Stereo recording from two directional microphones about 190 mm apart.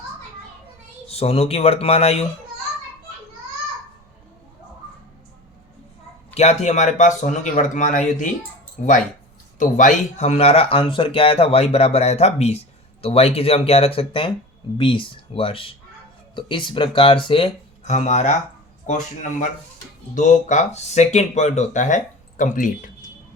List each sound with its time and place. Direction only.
1.0 s speech: 30° left (ahead or behind)
6.3 s speech: 35° left (ahead or behind)